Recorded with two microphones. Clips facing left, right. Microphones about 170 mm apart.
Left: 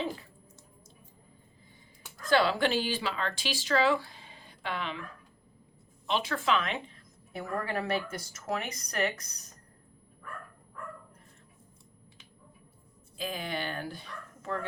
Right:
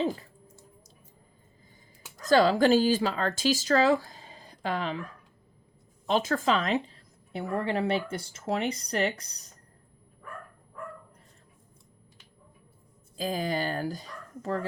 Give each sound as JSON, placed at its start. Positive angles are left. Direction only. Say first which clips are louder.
{"t": 2.2, "sound": "speech", "louder": "right 5 dB", "side_deg": -40}
{"t": 6.1, "sound": "a woman's voice", "louder": "right 4 dB", "side_deg": -40}
{"t": 13.1, "sound": "speech", "louder": "right 6 dB", "side_deg": -40}